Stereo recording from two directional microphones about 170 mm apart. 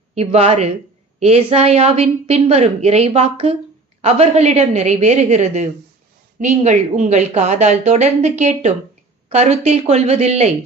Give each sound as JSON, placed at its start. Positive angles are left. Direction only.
{"t": 0.1, "sound": "a woman's voice", "side_deg": -40}